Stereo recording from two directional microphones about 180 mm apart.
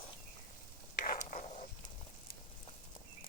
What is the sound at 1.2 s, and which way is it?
Zipper, 45° left (ahead or behind).